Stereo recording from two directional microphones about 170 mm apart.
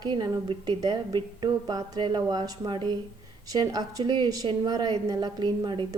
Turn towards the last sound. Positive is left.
turn(degrees=-25)  # may be behind; listen again after turning